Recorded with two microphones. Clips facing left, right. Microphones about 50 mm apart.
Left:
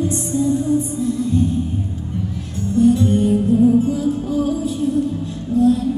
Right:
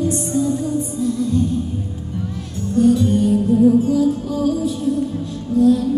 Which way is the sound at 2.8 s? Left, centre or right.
Left.